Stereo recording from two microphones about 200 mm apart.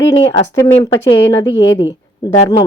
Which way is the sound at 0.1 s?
20° left (ahead or behind).